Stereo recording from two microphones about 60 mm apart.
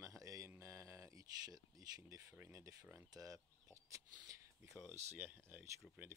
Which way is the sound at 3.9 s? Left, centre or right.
Right.